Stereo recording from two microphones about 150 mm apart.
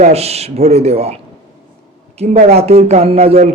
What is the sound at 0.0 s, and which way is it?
A man's voice, 45° right (ahead or behind).